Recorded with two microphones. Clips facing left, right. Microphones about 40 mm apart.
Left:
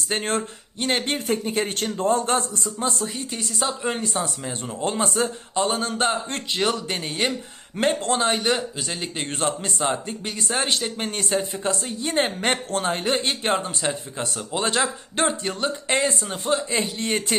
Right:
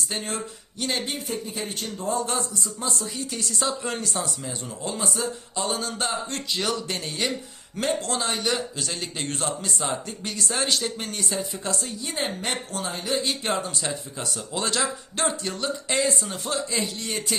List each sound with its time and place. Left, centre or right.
0.1 s speech: left
1.1 s speech: left
2.6 s speech: left
3.6 s speech: left